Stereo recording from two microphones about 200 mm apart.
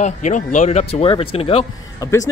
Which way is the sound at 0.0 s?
35° left (ahead or behind).